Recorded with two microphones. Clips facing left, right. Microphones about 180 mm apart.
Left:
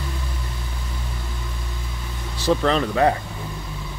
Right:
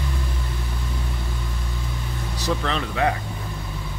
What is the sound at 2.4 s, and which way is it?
Speech, 35° left (ahead or behind).